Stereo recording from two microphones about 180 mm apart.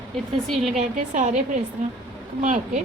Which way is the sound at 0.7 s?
45° right (ahead or behind).